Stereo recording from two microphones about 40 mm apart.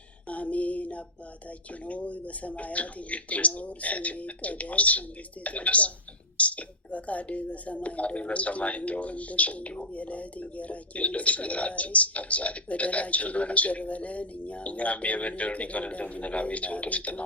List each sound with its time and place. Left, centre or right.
0.3 s female singing: left
1.9 s a woman's voice: left